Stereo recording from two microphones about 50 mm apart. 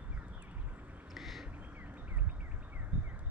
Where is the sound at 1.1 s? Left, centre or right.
Centre.